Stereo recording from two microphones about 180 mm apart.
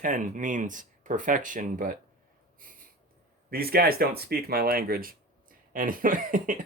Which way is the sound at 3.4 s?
55° right (ahead or behind).